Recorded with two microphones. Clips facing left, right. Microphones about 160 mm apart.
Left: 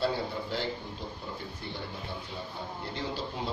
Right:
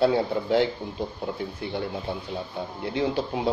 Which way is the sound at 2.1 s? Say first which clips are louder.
Right 8 dB; 60° right (ahead or behind).